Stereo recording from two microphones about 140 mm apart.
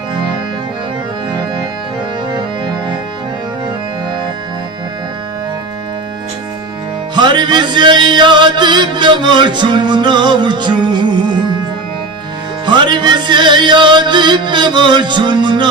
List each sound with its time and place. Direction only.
7.2 s music: 35° right (ahead or behind)
12.6 s music: 35° right (ahead or behind)